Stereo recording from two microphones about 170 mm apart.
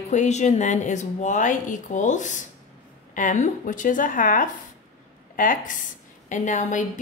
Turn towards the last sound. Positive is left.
turn(degrees=45)  # may be behind; listen again after turning